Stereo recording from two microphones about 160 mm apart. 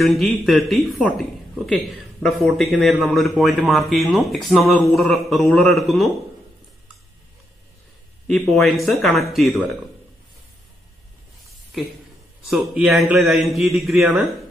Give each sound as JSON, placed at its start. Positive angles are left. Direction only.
{"t": 0.0, "sound": "a man's voice", "side_deg": 0}
{"t": 2.2, "sound": "a man's voice", "side_deg": 0}
{"t": 8.3, "sound": "a man's voice", "side_deg": 0}
{"t": 12.4, "sound": "a man's voice", "side_deg": -5}